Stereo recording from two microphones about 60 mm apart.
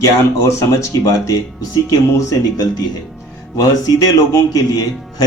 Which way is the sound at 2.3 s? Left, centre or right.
Left.